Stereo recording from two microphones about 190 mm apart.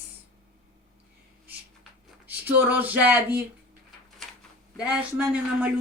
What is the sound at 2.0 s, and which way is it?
Speech, 10° right (ahead or behind).